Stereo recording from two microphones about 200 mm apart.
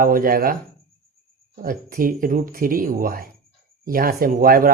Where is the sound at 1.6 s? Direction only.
45° right (ahead or behind).